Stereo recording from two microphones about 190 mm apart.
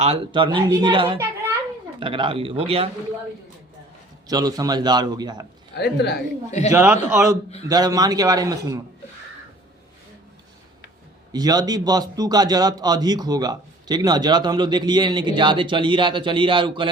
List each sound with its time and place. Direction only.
0.0 s a man's voice: 30° right (ahead or behind)
4.3 s a man's voice: 20° right (ahead or behind)
5.7 s a woman's voice: 60° left (ahead or behind)
6.7 s a man's voice: 10° right (ahead or behind)
11.3 s a man's voice: 20° right (ahead or behind)